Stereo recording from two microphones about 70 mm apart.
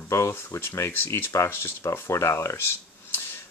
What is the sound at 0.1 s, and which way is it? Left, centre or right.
Speech, left.